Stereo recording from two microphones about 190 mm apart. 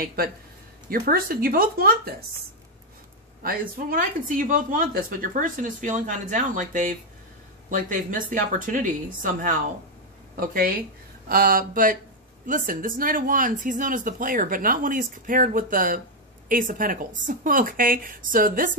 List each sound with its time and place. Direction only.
0.0 s speech: 50° right (ahead or behind)
3.4 s speech: 50° right (ahead or behind)